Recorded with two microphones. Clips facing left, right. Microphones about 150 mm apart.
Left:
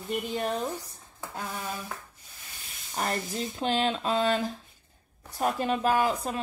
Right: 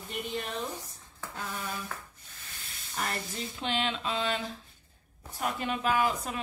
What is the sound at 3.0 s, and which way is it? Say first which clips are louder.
A woman's voice: left 5 dB; 35° left (ahead or behind).